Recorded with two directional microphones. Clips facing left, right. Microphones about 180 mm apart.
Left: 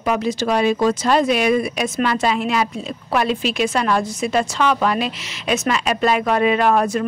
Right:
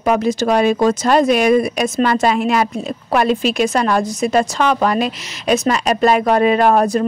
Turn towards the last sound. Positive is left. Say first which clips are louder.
# right 3 dB
turn(degrees=-40)  # may be behind; listen again after turning